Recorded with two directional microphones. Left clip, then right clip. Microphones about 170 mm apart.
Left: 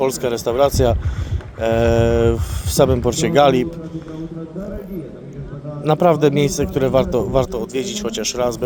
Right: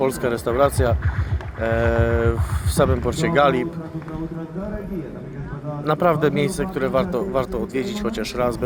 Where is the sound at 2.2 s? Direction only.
60° left (ahead or behind).